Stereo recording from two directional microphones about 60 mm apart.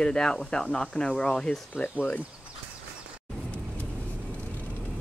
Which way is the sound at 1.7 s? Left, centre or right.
Left.